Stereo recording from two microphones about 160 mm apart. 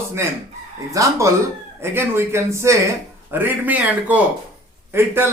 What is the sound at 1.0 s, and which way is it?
A man's voice, 20° right (ahead or behind).